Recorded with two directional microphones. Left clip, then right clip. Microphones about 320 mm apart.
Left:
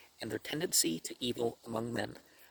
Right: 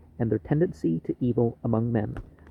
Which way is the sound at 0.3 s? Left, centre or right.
Left.